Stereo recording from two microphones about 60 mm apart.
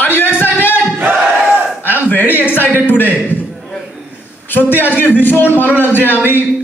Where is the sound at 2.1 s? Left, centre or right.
Left.